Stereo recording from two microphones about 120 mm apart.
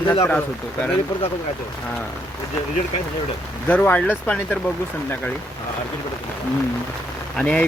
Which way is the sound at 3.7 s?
15° left (ahead or behind).